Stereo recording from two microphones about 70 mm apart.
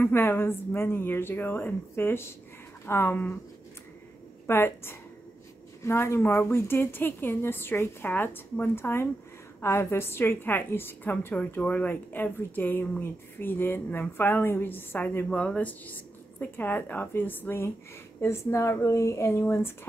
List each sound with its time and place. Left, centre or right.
0.0 s a woman's voice: left
4.5 s a woman's voice: left
15.2 s a woman's voice: centre; by 19.9 s left